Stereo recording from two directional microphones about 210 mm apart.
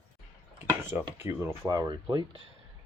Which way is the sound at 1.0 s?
10° right (ahead or behind).